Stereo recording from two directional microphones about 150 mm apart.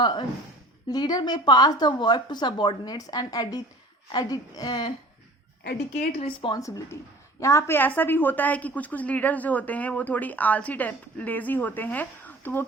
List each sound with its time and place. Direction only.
0.0 s a woman's voice: 30° left (ahead or behind)
6.1 s a woman's voice: 35° left (ahead or behind)
6.6 s a woman's voice: 20° left (ahead or behind)